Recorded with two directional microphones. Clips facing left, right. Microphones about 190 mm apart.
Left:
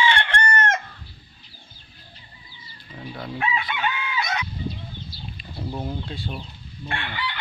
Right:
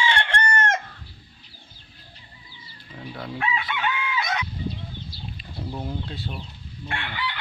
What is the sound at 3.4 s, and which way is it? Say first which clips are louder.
Chicken: left 1 dB; 25° left (ahead or behind).